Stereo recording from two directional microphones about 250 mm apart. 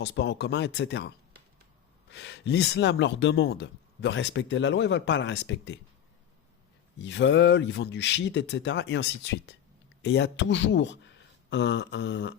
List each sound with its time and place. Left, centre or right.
0.0 s speech: left
7.0 s speech: left